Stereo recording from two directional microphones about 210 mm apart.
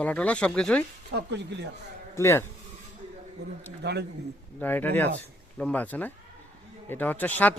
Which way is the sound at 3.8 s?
55° right (ahead or behind).